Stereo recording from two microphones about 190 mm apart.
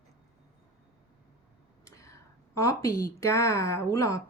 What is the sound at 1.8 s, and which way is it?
A woman's voice, 15° left (ahead or behind).